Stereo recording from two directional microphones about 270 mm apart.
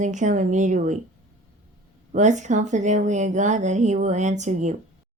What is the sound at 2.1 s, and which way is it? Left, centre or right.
Speech, right.